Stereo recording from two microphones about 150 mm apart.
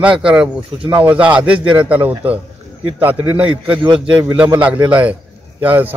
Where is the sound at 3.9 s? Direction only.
35° right (ahead or behind).